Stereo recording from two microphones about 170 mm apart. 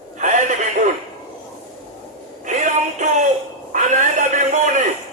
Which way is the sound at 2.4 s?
45° right (ahead or behind).